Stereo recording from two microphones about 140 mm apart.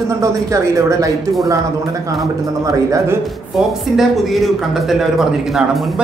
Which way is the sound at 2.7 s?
25° right (ahead or behind).